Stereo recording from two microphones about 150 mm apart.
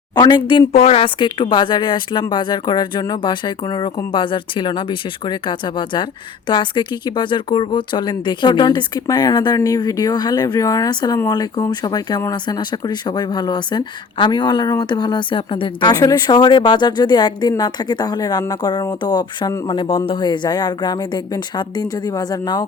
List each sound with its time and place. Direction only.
0.2 s speech: 30° left (ahead or behind)